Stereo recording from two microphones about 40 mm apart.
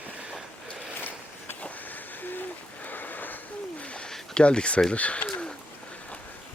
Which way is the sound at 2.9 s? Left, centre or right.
Left.